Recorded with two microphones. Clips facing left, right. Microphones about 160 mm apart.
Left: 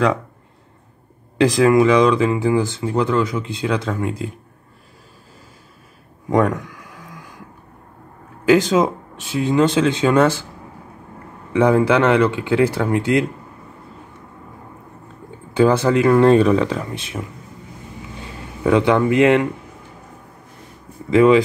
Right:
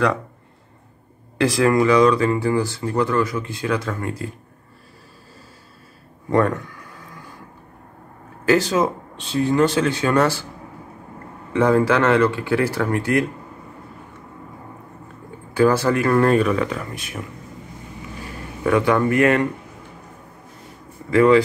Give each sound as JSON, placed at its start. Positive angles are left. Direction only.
{"t": 1.4, "sound": "speech", "side_deg": 20}
{"t": 6.4, "sound": "a sound", "side_deg": 10}
{"t": 8.5, "sound": "speech", "side_deg": 20}
{"t": 11.5, "sound": "speech", "side_deg": 15}
{"t": 15.5, "sound": "speech", "side_deg": 20}
{"t": 18.2, "sound": "speech", "side_deg": 20}
{"t": 21.1, "sound": "speech", "side_deg": 20}